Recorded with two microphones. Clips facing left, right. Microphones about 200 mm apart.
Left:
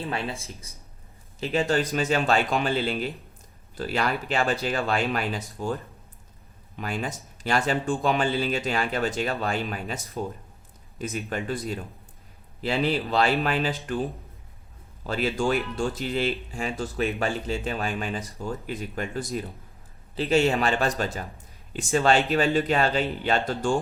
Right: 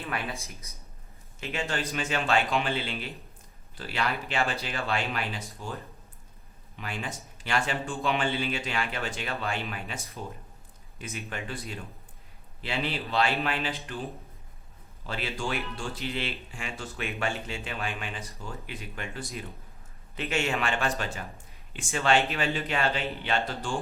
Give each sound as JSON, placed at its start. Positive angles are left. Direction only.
{"t": 0.0, "sound": "speech", "side_deg": 30}
{"t": 6.7, "sound": "speech", "side_deg": 45}
{"t": 12.6, "sound": "speech", "side_deg": 40}
{"t": 15.0, "sound": "speech", "side_deg": 45}